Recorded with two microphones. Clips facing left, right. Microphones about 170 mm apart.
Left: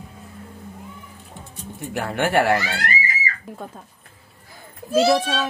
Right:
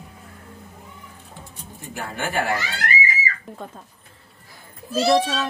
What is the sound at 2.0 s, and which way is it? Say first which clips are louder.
Speech: left 6 dB; 70° left (ahead or behind).